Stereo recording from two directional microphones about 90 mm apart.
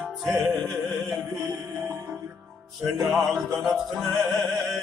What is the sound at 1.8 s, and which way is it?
Music, 30° right (ahead or behind).